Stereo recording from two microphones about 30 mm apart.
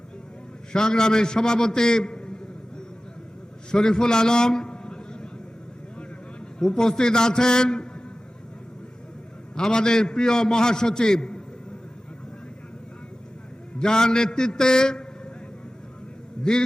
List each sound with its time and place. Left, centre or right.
0.7 s a man's voice: left
3.7 s a sound: left
6.6 s a man's voice: left
9.6 s a man's voice: left
13.7 s a man's voice: left
16.4 s a man's voice: left